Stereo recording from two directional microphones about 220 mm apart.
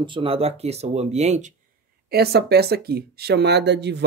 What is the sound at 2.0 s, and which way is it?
Speech, 45° right (ahead or behind).